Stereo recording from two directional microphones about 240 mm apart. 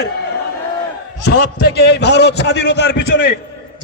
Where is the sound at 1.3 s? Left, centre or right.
Left.